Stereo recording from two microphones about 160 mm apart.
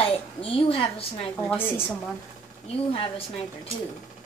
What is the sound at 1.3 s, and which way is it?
Speech, 15° left (ahead or behind).